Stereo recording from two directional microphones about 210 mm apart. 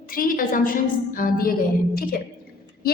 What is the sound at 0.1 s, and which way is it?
A woman's voice, 40° left (ahead or behind).